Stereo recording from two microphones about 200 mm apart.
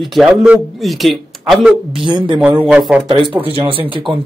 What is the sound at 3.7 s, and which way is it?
Speech, 25° right (ahead or behind).